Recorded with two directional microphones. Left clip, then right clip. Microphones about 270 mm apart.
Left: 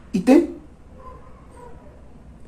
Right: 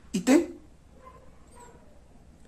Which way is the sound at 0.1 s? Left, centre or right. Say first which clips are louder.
Left 7 dB; centre.